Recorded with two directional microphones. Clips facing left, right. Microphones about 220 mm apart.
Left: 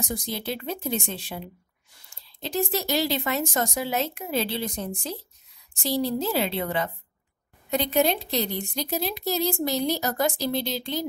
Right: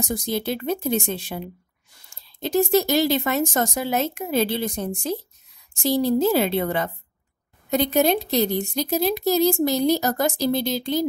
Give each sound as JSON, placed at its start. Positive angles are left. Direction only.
{"t": 0.1, "sound": "a woman's voice", "side_deg": -45}
{"t": 2.4, "sound": "a woman's voice", "side_deg": -50}